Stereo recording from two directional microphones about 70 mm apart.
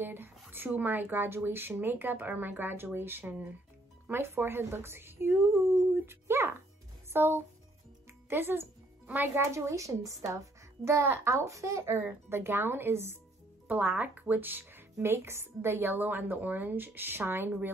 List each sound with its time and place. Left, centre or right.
0.0 s speech: right
5.9 s a sound: right
7.1 s speech: right
10.9 s speech: right
13.7 s speech: right